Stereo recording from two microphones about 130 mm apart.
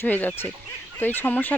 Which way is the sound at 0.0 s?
15° left (ahead or behind).